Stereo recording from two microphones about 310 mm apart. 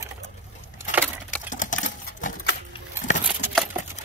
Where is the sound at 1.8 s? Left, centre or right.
Left.